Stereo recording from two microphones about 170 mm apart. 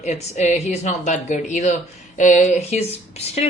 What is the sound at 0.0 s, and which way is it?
A woman's voice, 40° left (ahead or behind).